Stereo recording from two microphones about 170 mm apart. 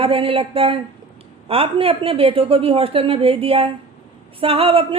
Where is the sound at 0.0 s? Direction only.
35° right (ahead or behind).